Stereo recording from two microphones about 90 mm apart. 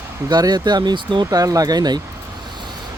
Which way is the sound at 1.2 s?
40° right (ahead or behind).